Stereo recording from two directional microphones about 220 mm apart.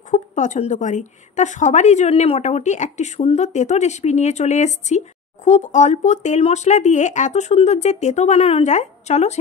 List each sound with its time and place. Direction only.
0.1 s a woman's voice: 35° left (ahead or behind)